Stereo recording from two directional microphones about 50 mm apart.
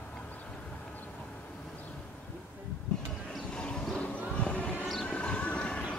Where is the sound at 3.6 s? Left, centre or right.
Centre.